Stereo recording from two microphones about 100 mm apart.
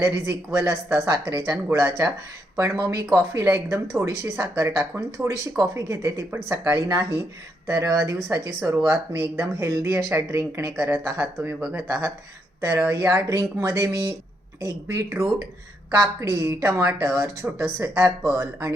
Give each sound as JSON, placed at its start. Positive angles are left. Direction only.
{"t": 0.0, "sound": "speech", "side_deg": -25}